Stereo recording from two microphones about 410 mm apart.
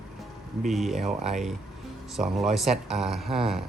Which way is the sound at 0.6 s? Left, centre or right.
Centre.